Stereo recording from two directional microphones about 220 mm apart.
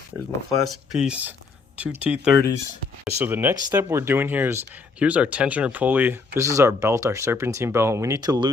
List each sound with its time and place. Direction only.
0.6 s speech: centre (ahead or behind); by 8.4 s 15° right (ahead or behind)